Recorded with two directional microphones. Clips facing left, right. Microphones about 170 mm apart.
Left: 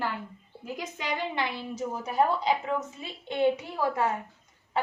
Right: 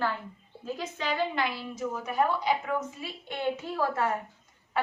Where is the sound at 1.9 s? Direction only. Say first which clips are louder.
Left 2 dB; 30° left (ahead or behind).